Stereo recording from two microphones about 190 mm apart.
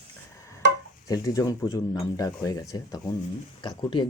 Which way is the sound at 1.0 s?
20° left (ahead or behind).